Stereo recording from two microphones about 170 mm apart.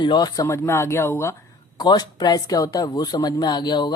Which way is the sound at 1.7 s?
25° left (ahead or behind).